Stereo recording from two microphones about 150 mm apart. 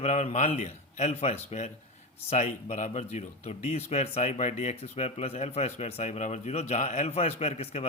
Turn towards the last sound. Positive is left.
turn(degrees=45)  # may be behind; listen again after turning